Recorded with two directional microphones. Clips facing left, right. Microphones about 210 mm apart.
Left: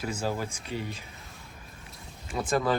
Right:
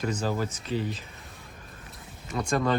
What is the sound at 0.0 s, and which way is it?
Speech, 10° left (ahead or behind).